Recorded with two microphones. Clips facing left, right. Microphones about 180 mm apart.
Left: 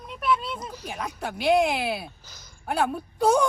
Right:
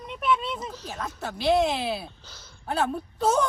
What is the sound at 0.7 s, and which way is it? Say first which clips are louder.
Speech: left 1 dB; 10° left (ahead or behind).